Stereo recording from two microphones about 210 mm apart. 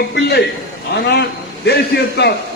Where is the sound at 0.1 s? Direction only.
55° left (ahead or behind).